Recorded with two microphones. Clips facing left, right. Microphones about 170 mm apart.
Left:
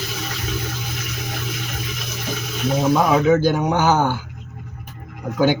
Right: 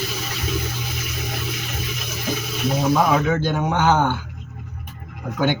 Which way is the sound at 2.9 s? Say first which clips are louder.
Left 4 dB; 5° left (ahead or behind).